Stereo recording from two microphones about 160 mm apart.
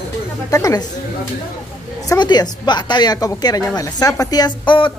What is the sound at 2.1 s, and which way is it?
A woman's voice, 25° left (ahead or behind).